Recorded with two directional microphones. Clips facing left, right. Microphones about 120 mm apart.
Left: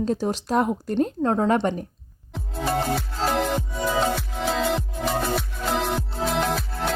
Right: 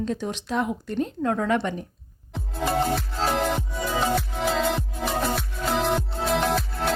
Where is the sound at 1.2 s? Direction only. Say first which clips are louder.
Left 2 dB; 30° left (ahead or behind).